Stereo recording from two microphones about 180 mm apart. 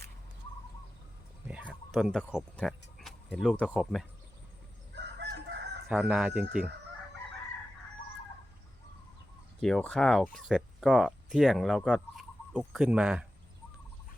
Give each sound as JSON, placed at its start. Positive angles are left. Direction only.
{"t": 1.5, "sound": "speech", "side_deg": -5}
{"t": 4.9, "sound": "crowing", "side_deg": -70}
{"t": 5.9, "sound": "speech", "side_deg": -5}
{"t": 9.6, "sound": "speech", "side_deg": 5}